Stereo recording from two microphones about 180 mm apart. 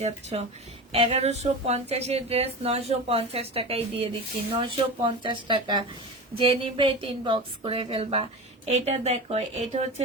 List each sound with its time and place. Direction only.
0.0 s a woman's voice: 40° right (ahead or behind)